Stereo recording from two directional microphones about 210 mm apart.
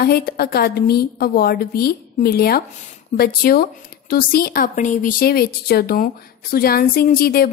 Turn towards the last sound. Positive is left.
turn(degrees=45)  # may be behind; listen again after turning